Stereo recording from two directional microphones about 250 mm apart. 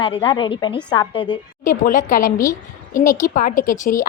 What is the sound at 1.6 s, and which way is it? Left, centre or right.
Speech, left.